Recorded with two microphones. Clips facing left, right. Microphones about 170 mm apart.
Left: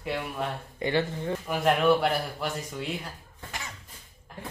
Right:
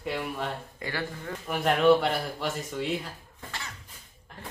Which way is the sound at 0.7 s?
20° left (ahead or behind).